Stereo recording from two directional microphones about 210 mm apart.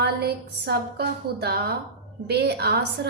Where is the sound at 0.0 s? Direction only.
50° right (ahead or behind).